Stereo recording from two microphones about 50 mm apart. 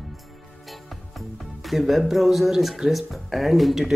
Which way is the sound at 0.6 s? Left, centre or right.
Centre.